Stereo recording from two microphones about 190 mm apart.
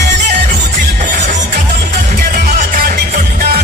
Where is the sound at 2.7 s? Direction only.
45° right (ahead or behind).